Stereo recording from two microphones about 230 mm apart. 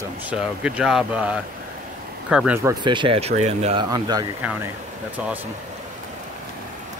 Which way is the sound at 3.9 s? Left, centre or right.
Centre.